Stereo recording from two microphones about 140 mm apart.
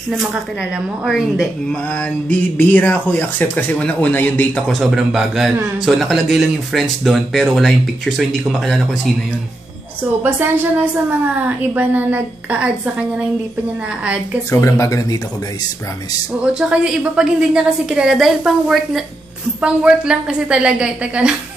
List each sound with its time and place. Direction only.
0.1 s a woman's voice: 5° right (ahead or behind)
1.7 s a woman's voice: 10° left (ahead or behind)
10.2 s a woman's voice: 15° right (ahead or behind)
14.5 s speech: 20° left (ahead or behind)
16.5 s a woman's voice: 5° right (ahead or behind)